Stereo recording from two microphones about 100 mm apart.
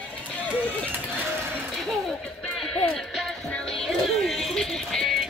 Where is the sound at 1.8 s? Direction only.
Centre (ahead or behind).